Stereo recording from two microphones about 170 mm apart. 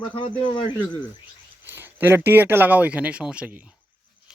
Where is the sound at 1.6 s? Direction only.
10° right (ahead or behind).